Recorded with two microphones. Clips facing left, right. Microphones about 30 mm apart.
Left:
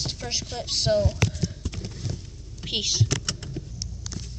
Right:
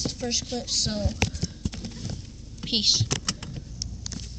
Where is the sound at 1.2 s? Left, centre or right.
Right.